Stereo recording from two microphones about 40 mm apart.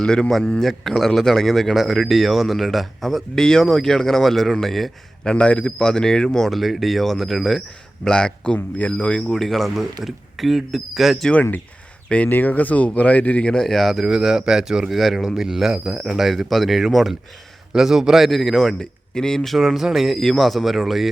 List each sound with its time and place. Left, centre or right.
0.0 s a man's voice: centre
5.2 s a man's voice: left
5.8 s a man's voice: centre
6.5 s speech: centre
8.0 s a man's voice: left
9.3 s speech: centre
11.3 s speech: left
12.3 s speech: left
13.5 s a man's voice: centre
14.0 s speech: centre
18.3 s a man's voice: centre
19.5 s speech: centre
20.1 s speech: centre